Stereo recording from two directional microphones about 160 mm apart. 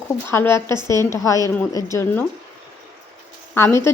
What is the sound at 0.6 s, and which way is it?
Speech, 25° right (ahead or behind).